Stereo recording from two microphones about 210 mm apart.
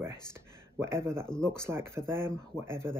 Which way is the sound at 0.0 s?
10° right (ahead or behind).